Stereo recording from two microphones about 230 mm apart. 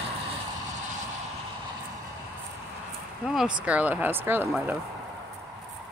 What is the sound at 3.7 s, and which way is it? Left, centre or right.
Speech, centre.